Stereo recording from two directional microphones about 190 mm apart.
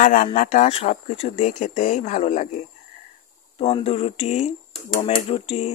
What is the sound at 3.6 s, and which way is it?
Speech, 30° left (ahead or behind).